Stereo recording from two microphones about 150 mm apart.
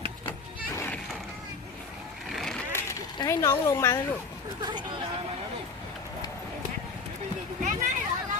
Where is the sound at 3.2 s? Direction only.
20° left (ahead or behind).